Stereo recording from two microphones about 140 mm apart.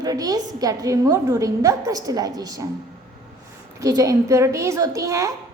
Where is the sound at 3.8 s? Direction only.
25° right (ahead or behind).